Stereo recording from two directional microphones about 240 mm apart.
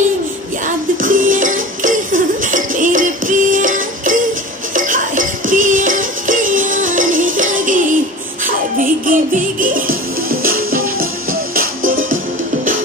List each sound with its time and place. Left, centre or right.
0.7 s music: right